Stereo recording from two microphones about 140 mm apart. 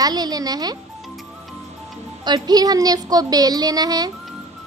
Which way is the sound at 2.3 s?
30° right (ahead or behind).